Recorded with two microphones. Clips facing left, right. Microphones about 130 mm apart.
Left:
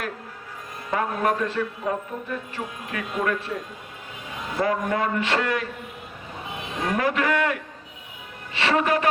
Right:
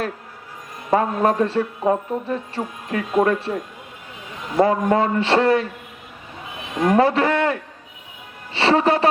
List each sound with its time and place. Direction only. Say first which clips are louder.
0.9 s a man's voice: right 6 dB; 30° right (ahead or behind)
4.5 s a man's voice: right 7 dB; 30° right (ahead or behind)
6.8 s a man's voice: right 7 dB; 30° right (ahead or behind)